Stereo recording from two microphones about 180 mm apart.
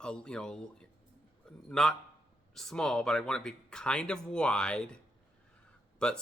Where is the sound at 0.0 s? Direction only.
5° left (ahead or behind).